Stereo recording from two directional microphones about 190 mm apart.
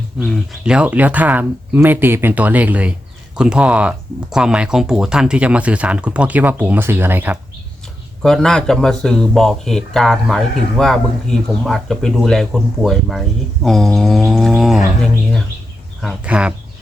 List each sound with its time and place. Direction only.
0.2 s speech: centre (ahead or behind)
8.2 s speech: 5° left (ahead or behind)